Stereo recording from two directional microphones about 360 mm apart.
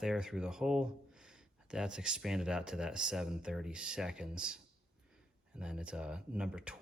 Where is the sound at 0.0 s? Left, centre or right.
Centre.